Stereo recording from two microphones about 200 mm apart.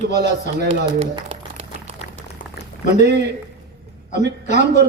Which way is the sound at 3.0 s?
55° right (ahead or behind).